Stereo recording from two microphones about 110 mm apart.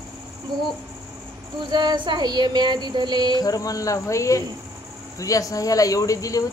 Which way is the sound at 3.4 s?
35° left (ahead or behind).